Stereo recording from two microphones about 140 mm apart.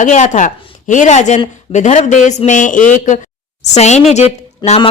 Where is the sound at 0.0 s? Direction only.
60° left (ahead or behind).